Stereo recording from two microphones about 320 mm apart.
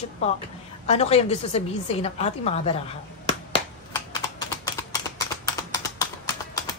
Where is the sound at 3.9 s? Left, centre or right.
Centre.